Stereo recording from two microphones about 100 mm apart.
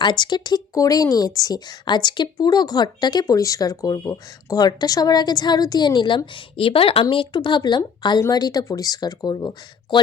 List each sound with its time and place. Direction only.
0.0 s speech: 50° left (ahead or behind)